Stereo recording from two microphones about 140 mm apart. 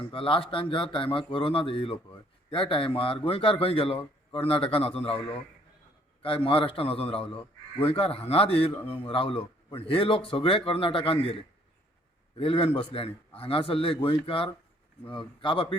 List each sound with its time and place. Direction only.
0.0 s a man's voice: 40° left (ahead or behind)